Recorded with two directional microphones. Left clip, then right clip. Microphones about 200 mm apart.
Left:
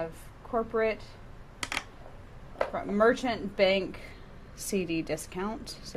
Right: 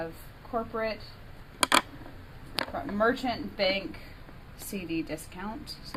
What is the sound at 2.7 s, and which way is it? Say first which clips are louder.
Speech: left 3 dB; 45° left (ahead or behind).